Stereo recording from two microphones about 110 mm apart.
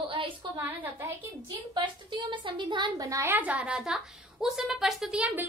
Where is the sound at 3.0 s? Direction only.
30° right (ahead or behind).